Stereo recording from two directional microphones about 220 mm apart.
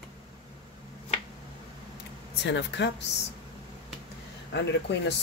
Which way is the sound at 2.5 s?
55° left (ahead or behind).